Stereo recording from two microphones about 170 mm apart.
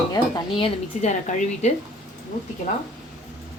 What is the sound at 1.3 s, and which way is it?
Speech, 45° left (ahead or behind).